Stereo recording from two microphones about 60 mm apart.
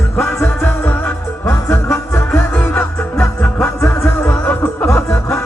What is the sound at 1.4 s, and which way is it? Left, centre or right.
Music, left.